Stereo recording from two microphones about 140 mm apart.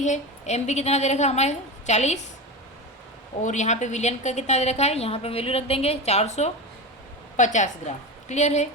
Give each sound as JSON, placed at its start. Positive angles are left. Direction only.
{"t": 0.0, "sound": "a woman's voice", "side_deg": 55}
{"t": 3.4, "sound": "a woman's voice", "side_deg": 55}